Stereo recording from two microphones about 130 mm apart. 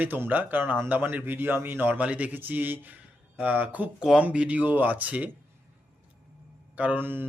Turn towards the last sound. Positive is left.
turn(degrees=-15)  # may be behind; listen again after turning